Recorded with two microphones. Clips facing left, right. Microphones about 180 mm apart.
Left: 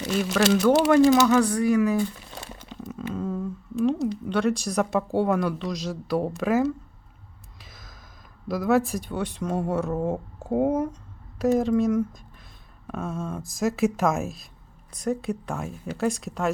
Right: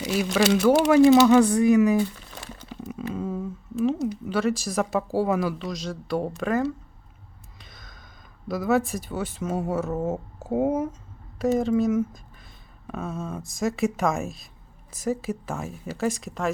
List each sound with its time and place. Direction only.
0.0 s a sound: 5° right (ahead or behind)
0.3 s speech: centre (ahead or behind)
1.0 s speech: 20° right (ahead or behind); by 6.7 s 5° left (ahead or behind)
7.6 s gasp: centre (ahead or behind)
8.4 s speech: centre (ahead or behind)